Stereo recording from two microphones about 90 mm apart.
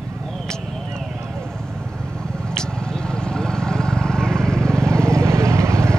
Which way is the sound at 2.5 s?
5° left (ahead or behind).